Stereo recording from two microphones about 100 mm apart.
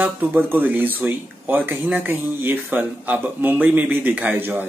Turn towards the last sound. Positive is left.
turn(degrees=-20)  # may be behind; listen again after turning